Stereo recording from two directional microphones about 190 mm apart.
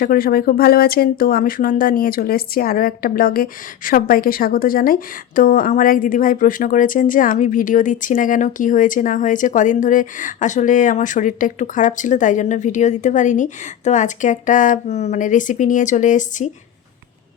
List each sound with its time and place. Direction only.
0.0 s speech: 50° left (ahead or behind)